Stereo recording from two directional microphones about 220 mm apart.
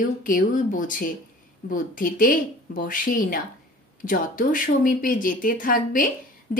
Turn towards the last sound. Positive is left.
turn(degrees=40)  # may be behind; listen again after turning